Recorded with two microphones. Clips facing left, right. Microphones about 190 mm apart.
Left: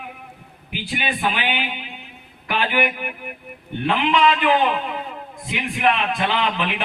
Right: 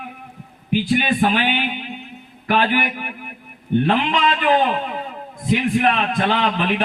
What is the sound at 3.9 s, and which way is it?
A man's voice, 40° right (ahead or behind).